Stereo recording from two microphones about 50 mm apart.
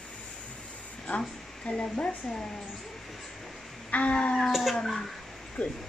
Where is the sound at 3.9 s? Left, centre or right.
Left.